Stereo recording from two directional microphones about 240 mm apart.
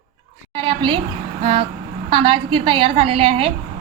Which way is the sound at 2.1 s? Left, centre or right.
Right.